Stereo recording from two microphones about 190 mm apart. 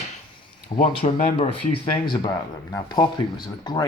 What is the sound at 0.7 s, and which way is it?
Speech, 30° left (ahead or behind).